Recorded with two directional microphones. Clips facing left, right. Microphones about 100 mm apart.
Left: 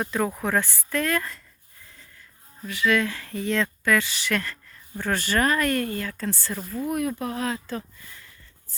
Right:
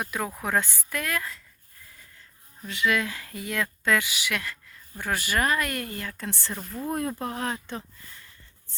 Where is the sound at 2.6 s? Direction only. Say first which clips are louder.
Left 3 dB; 20° right (ahead or behind).